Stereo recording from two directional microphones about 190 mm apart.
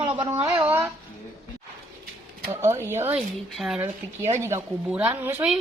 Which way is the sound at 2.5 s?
15° right (ahead or behind).